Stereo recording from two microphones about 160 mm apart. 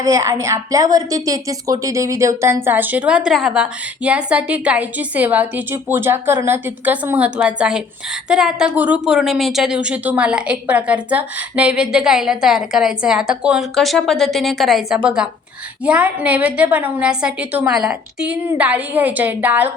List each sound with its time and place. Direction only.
0.0 s a woman's voice: 20° right (ahead or behind)